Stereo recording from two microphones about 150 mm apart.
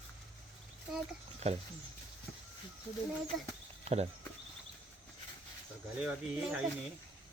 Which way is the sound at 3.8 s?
45° right (ahead or behind).